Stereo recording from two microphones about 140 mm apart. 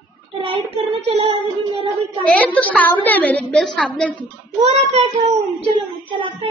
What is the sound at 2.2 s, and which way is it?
A woman's voice, 10° left (ahead or behind).